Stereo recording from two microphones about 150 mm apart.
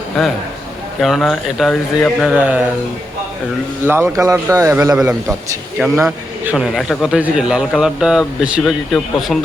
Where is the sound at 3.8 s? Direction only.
15° right (ahead or behind).